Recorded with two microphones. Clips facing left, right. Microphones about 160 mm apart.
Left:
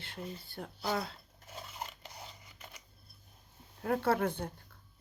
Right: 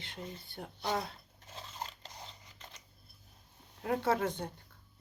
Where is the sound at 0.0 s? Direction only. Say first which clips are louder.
Left 2 dB; 20° right (ahead or behind).